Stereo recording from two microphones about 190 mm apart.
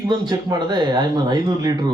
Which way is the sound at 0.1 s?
20° right (ahead or behind).